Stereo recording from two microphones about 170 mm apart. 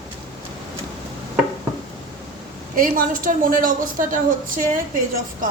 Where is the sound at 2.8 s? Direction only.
55° right (ahead or behind).